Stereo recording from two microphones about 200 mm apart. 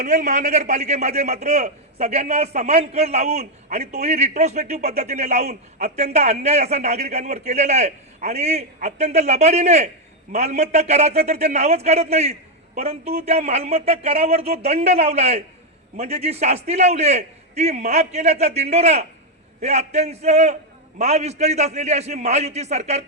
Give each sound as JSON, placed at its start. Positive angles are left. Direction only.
{"t": 0.0, "sound": "a man's voice", "side_deg": -35}